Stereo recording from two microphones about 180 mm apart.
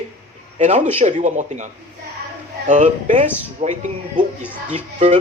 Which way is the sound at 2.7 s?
40° right (ahead or behind).